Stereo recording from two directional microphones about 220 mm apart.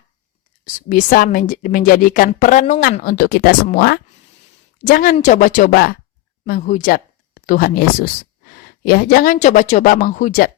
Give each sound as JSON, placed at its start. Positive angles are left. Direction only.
{"t": 0.6, "sound": "a woman's voice", "side_deg": 40}